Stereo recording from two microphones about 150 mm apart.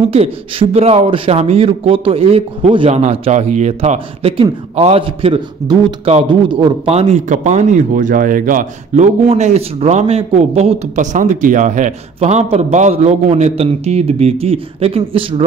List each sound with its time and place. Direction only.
0.1 s a man's voice: 40° right (ahead or behind)
3.0 s a man's voice: 50° right (ahead or behind)